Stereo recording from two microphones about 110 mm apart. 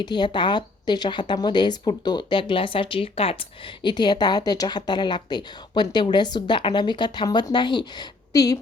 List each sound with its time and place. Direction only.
0.0 s a woman's voice: 45° left (ahead or behind)